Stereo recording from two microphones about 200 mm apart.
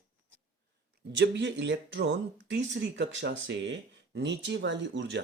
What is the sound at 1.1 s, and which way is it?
Speech, 60° right (ahead or behind).